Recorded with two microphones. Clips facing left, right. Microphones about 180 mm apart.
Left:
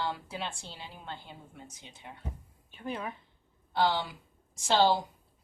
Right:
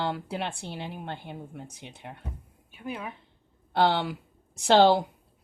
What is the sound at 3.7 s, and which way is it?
Speech, 65° right (ahead or behind).